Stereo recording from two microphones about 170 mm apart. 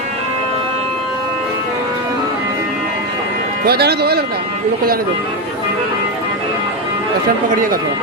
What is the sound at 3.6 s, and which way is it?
Speech, 70° right (ahead or behind).